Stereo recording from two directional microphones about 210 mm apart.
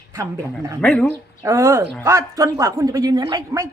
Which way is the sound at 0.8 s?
5° left (ahead or behind).